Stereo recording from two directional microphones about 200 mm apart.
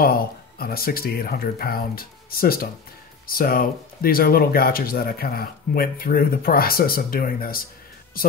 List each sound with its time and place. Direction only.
0.0 s speech: 50° left (ahead or behind)